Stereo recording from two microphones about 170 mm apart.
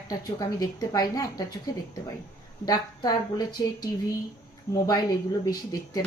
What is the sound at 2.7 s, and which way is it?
A woman's voice, 20° left (ahead or behind).